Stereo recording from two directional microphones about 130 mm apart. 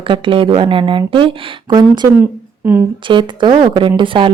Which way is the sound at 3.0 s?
40° right (ahead or behind).